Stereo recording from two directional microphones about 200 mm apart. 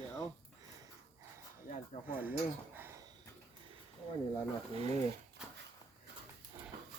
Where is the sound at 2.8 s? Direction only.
10° right (ahead or behind).